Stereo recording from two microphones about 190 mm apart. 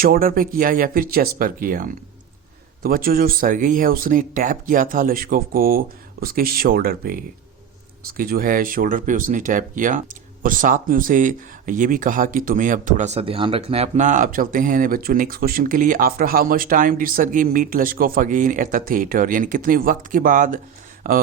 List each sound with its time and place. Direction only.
0.0 s speech: 50° right (ahead or behind)